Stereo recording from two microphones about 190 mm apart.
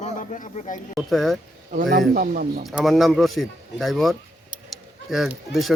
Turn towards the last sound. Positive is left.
turn(degrees=0)  # may be behind; listen again after turning